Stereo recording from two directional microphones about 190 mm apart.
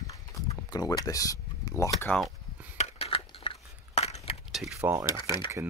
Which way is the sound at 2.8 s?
30° left (ahead or behind).